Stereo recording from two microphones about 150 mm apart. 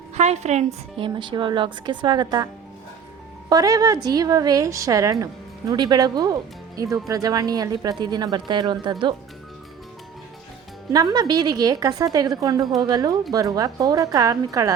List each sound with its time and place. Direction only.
0.1 s a woman's voice: 45° right (ahead or behind); by 2.5 s 25° right (ahead or behind)
3.5 s a woman's voice: 25° right (ahead or behind)
10.9 s a woman's voice: 25° right (ahead or behind)